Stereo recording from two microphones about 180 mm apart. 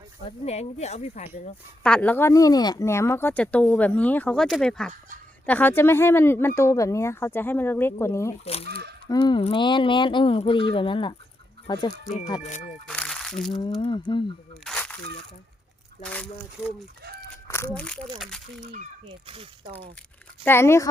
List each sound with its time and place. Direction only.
0.3 s speech: 35° left (ahead or behind)
1.8 s speech: 5° left (ahead or behind)
8.4 s speech: 35° left (ahead or behind)
12.0 s speech: 40° left (ahead or behind)
12.9 s crumpling: 5° left (ahead or behind)
13.5 s speech: 25° left (ahead or behind)
14.6 s a sound: 5° left (ahead or behind)
17.5 s speech: 10° left (ahead or behind)
18.6 s speech: 45° right (ahead or behind)
19.0 s speech: 30° right (ahead or behind)
20.4 s speech: 15° left (ahead or behind)